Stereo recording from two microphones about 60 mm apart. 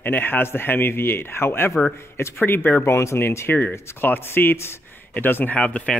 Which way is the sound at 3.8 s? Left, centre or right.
Left.